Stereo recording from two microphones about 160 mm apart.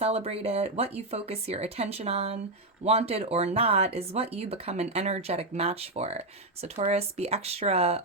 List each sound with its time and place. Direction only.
0.0 s speech: 40° right (ahead or behind)